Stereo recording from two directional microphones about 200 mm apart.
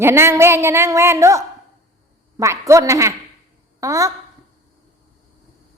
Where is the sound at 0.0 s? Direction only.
10° right (ahead or behind).